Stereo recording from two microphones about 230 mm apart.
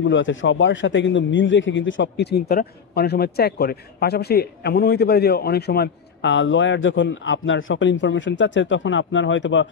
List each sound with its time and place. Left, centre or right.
0.1 s a man's voice: left